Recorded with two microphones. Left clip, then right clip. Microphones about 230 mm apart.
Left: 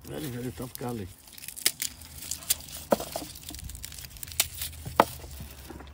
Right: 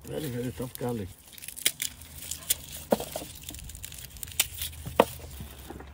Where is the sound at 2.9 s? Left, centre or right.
Centre.